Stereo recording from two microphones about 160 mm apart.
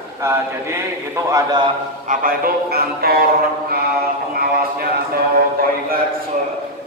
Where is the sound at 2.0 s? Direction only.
60° right (ahead or behind).